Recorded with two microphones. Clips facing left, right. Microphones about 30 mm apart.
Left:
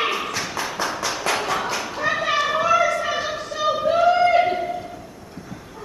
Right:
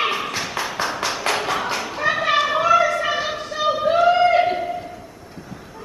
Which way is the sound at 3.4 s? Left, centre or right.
Right.